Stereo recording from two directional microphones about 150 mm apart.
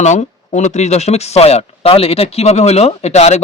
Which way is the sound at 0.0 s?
50° left (ahead or behind).